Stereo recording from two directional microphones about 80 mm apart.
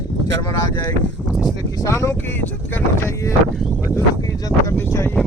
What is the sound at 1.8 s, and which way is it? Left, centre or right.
Speech, left.